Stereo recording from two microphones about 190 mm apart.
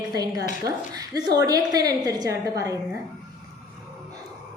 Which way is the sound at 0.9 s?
20° right (ahead or behind).